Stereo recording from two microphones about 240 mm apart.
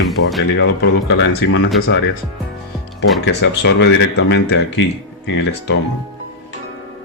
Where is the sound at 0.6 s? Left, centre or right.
Left.